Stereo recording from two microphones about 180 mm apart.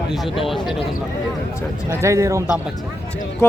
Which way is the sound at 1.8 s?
15° right (ahead or behind).